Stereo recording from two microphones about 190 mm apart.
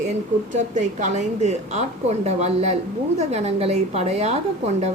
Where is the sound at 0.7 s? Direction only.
40° right (ahead or behind).